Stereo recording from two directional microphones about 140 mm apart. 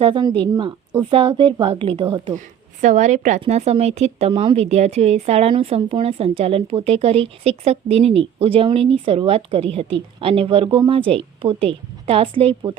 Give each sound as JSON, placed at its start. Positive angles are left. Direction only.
{"t": 0.0, "sound": "a woman's voice", "side_deg": -35}
{"t": 2.8, "sound": "a woman's voice", "side_deg": -60}
{"t": 3.4, "sound": "speech", "side_deg": -50}